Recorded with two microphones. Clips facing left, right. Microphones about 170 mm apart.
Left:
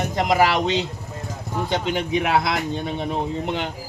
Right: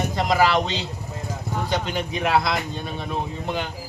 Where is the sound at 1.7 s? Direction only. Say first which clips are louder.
Left 4 dB; 20° left (ahead or behind).